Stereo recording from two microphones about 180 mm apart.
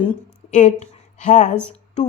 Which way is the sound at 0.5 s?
40° left (ahead or behind).